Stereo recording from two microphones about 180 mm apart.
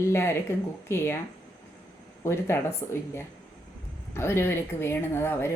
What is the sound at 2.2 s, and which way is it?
Speech, 15° left (ahead or behind).